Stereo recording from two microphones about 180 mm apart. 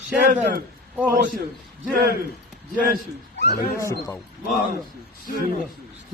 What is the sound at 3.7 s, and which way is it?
Speech, 15° left (ahead or behind).